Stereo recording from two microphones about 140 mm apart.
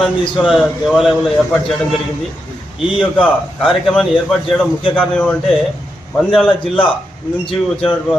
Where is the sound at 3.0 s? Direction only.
5° left (ahead or behind).